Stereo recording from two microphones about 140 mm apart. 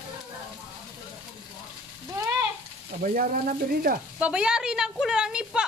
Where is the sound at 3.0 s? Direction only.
85° right.